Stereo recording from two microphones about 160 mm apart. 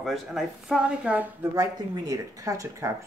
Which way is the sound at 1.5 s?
20° right (ahead or behind).